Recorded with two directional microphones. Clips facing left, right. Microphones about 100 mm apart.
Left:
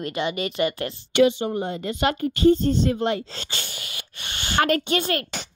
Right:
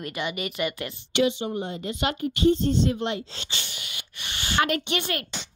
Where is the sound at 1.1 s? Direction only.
50° left (ahead or behind); by 5.2 s 35° left (ahead or behind).